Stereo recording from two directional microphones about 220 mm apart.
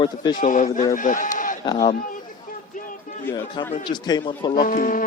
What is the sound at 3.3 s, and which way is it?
A man's voice, 10° left (ahead or behind).